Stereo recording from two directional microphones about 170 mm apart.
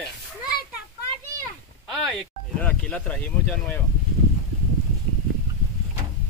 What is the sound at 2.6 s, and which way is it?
Speech, 10° left (ahead or behind).